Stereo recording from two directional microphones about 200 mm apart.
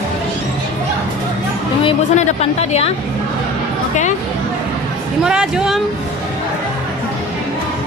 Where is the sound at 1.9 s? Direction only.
30° left (ahead or behind).